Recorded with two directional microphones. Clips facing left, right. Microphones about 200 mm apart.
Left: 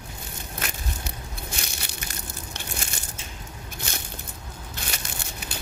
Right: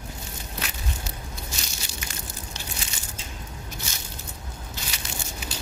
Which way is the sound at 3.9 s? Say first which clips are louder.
Left 4 dB; 60° left (ahead or behind).